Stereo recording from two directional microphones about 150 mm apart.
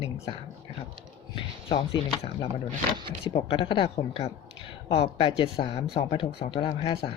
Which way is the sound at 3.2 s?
35° left (ahead or behind).